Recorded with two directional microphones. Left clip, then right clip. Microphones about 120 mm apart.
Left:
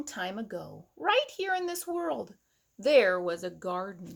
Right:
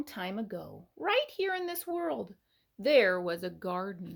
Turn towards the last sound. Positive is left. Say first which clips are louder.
# left 1 dB
turn(degrees=-40)  # may be behind; listen again after turning